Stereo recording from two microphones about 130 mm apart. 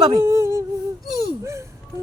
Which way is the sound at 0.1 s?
20° right (ahead or behind).